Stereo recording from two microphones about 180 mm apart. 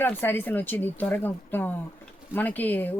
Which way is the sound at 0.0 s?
10° left (ahead or behind).